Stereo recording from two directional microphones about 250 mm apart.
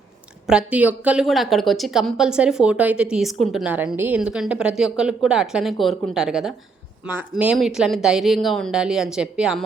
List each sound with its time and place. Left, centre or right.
0.4 s a woman's voice: centre